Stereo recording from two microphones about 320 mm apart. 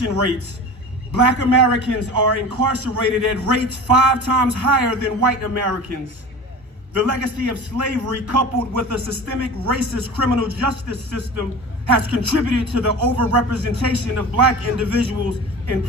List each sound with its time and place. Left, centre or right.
0.0 s a man's voice: right